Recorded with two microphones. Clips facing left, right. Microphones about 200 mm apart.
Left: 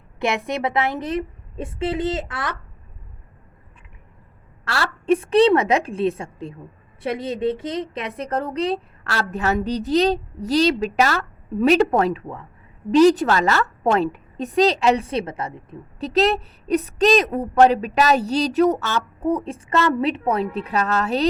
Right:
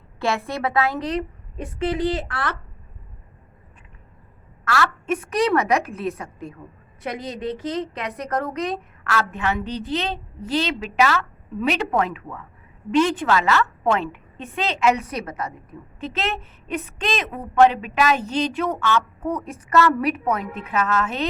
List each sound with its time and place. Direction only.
0.2 s a woman's voice: 20° left (ahead or behind)
4.6 s a woman's voice: 30° left (ahead or behind)